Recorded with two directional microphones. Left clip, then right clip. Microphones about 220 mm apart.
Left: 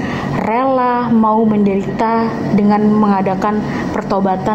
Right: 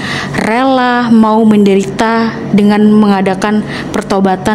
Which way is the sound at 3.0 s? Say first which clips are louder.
Right 3 dB; 65° right (ahead or behind).